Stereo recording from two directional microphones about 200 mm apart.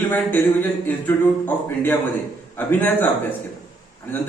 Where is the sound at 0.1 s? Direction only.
10° left (ahead or behind).